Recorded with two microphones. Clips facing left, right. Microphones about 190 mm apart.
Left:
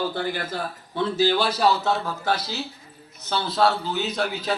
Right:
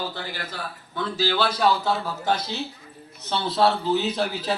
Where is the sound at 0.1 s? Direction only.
50° left (ahead or behind).